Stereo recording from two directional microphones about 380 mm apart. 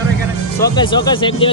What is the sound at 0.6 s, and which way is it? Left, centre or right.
Speech, centre.